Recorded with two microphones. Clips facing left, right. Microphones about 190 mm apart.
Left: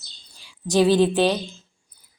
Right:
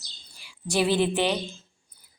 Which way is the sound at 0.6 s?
15° left (ahead or behind).